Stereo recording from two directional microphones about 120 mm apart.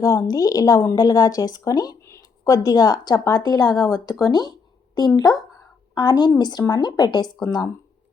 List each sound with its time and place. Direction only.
0.0 s a woman's voice: 25° left (ahead or behind)